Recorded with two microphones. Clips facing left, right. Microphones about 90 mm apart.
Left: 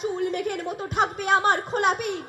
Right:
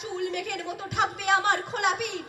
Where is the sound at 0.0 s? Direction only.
40° left (ahead or behind).